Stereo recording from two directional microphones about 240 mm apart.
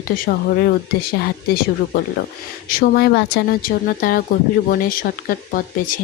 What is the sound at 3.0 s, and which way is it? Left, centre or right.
Speech, left.